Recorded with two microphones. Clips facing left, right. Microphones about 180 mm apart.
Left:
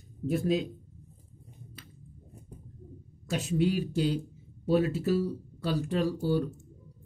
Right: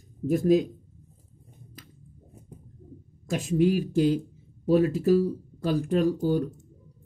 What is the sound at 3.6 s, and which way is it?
Speech, 40° right (ahead or behind).